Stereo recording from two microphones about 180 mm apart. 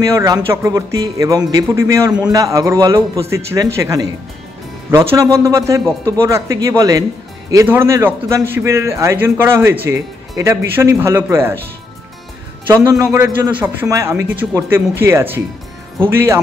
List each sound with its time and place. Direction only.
0.0 s a man's voice: 20° right (ahead or behind)
2.0 s a man's voice: 5° right (ahead or behind)
2.3 s a man's voice: 15° right (ahead or behind)
12.6 s a man's voice: 15° right (ahead or behind)